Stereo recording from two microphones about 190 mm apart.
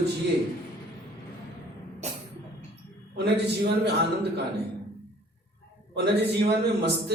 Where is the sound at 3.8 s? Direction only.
60° right (ahead or behind).